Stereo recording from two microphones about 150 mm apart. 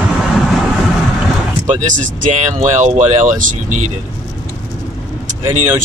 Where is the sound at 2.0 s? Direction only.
55° right (ahead or behind).